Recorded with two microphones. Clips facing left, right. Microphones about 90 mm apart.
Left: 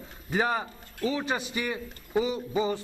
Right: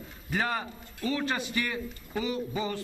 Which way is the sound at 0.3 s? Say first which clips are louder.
Left 3 dB; 15° left (ahead or behind).